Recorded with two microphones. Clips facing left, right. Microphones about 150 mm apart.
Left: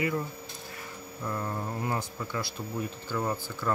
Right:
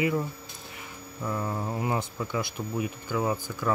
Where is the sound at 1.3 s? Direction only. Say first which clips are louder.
Right 3 dB; 10° right (ahead or behind).